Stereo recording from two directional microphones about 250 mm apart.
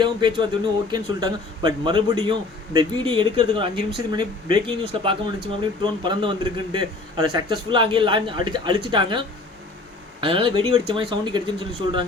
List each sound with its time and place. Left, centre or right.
0.0 s a man's voice: centre